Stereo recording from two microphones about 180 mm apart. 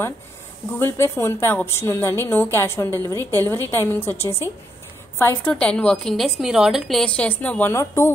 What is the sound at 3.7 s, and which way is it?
A woman's voice, 10° left (ahead or behind).